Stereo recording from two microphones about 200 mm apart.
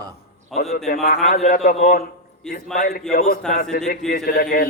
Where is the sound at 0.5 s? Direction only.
35° left (ahead or behind).